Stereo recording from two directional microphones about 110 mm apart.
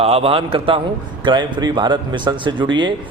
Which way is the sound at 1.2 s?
45° right (ahead or behind).